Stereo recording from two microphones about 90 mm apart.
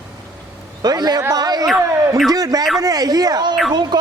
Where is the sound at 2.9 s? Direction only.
45° right (ahead or behind).